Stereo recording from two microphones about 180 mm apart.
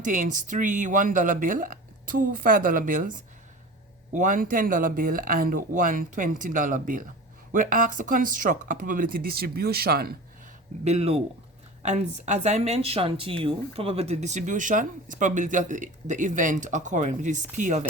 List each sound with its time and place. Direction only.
0.0 s speech: 45° right (ahead or behind)
10.8 s speech: 35° right (ahead or behind)